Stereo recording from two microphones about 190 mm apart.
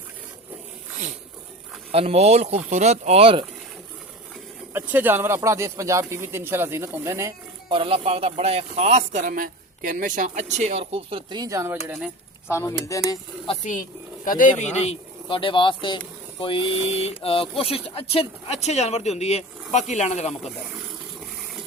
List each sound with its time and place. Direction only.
1.9 s a man's voice: 30° right (ahead or behind)
4.7 s speech: 10° right (ahead or behind)
7.7 s a man's voice: 30° right (ahead or behind); by 12.1 s 10° right (ahead or behind)
12.5 s speech: 15° left (ahead or behind)
13.6 s speech: 40° left (ahead or behind)